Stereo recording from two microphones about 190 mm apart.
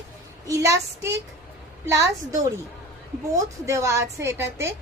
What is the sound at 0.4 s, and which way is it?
A woman's voice, 15° right (ahead or behind).